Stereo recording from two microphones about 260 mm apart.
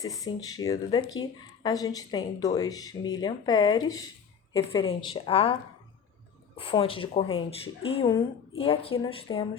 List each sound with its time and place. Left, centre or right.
0.0 s a woman's voice: centre
6.6 s a woman's voice: left